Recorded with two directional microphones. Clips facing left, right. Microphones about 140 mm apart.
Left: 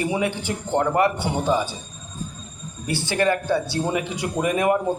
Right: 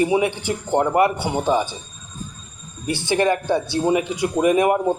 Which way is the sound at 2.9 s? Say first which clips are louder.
Right 2 dB; 20° right (ahead or behind).